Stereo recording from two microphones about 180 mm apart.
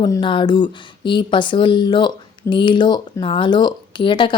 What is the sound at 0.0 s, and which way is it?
Speech, 25° left (ahead or behind).